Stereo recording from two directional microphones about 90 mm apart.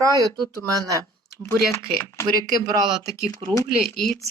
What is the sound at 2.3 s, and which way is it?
Speech, 45° right (ahead or behind).